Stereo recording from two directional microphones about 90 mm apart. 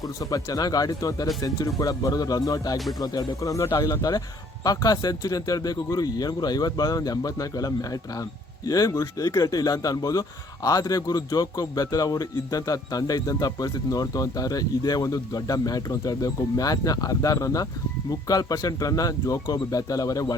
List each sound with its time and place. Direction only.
0.2 s speech: 40° left (ahead or behind)